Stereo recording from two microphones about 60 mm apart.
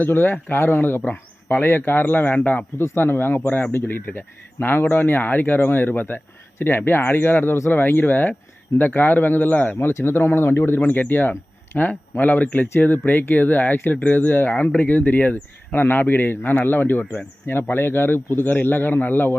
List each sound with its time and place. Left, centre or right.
0.0 s speech: left
2.7 s speech: left
6.6 s speech: left
9.7 s speech: left